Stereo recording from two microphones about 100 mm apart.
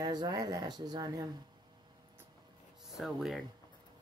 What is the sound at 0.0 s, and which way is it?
Speech, 45° right (ahead or behind).